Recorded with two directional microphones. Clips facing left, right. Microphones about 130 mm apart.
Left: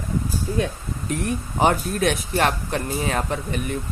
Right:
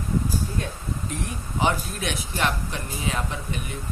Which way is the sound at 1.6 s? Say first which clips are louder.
Left 6 dB; 50° left (ahead or behind).